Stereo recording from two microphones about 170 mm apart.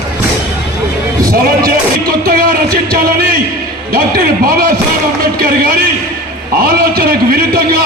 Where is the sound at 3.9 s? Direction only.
60° right (ahead or behind).